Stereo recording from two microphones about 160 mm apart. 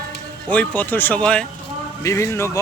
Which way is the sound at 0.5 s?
10° left (ahead or behind).